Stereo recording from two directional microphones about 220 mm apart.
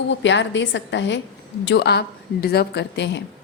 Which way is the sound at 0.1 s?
55° left (ahead or behind).